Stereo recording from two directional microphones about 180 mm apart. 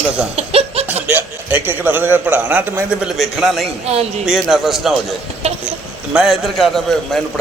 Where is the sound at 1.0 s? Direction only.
10° right (ahead or behind).